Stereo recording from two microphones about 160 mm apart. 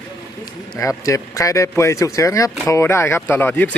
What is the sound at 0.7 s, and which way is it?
Speech, 20° left (ahead or behind).